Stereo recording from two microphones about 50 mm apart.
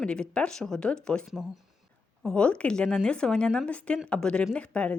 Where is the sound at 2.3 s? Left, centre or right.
Left.